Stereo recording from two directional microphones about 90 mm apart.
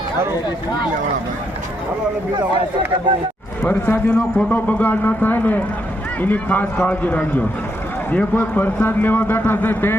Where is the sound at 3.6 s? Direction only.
20° left (ahead or behind).